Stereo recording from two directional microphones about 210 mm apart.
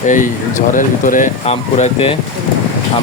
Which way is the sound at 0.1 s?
40° left (ahead or behind).